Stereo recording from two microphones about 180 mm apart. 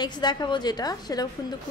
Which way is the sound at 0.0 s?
25° left (ahead or behind).